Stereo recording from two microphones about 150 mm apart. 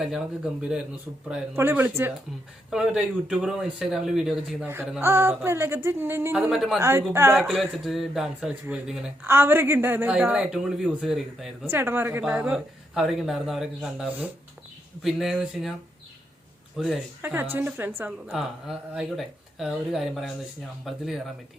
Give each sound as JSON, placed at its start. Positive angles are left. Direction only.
{"t": 1.5, "sound": "speech", "side_deg": -15}
{"t": 4.6, "sound": "speech", "side_deg": -15}
{"t": 6.3, "sound": "speech", "side_deg": -5}
{"t": 6.7, "sound": "speech", "side_deg": -20}
{"t": 7.3, "sound": "speech", "side_deg": 0}
{"t": 9.2, "sound": "speech", "side_deg": -15}
{"t": 11.6, "sound": "speech", "side_deg": -15}
{"t": 16.7, "sound": "speech", "side_deg": 0}
{"t": 17.2, "sound": "speech", "side_deg": -15}
{"t": 18.3, "sound": "speech", "side_deg": -5}